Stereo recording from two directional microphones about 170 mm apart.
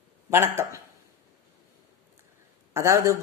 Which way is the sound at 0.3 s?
15° right (ahead or behind).